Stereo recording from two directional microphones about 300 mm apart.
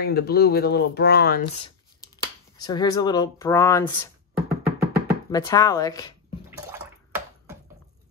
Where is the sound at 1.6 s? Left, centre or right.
Centre.